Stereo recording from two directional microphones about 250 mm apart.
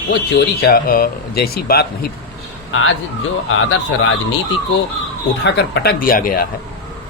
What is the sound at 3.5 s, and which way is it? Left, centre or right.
Speech, left.